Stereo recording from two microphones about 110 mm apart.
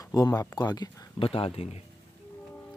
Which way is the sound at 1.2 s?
60° left (ahead or behind).